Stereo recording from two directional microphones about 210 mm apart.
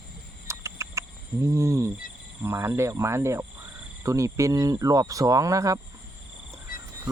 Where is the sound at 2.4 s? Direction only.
10° right (ahead or behind).